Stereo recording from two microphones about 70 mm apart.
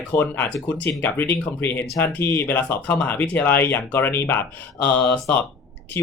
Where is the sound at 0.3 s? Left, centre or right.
Left.